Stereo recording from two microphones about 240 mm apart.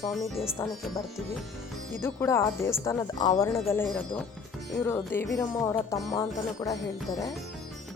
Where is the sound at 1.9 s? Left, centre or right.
Centre.